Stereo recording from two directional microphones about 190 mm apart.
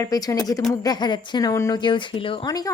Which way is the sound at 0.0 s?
20° left (ahead or behind).